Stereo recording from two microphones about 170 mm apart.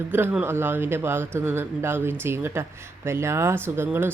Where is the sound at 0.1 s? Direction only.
10° right (ahead or behind).